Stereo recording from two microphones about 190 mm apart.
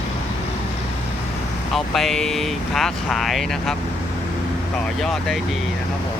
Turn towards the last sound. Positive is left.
turn(degrees=0)  # may be behind; listen again after turning